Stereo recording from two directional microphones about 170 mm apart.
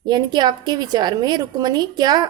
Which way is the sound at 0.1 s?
25° right (ahead or behind).